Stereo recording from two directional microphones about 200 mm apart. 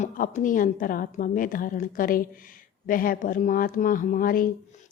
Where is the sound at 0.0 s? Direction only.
40° left (ahead or behind).